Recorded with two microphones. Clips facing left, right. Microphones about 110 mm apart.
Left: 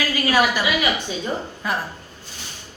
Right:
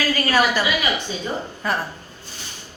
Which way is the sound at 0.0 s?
10° left (ahead or behind).